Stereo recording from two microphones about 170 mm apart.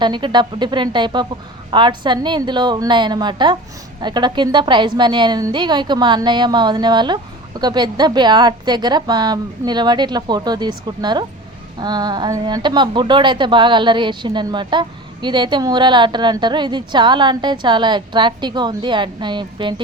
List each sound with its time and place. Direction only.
0.0 s a woman's voice: 25° right (ahead or behind)